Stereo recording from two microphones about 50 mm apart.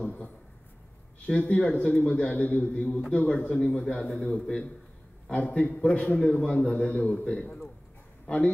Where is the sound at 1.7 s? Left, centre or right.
Left.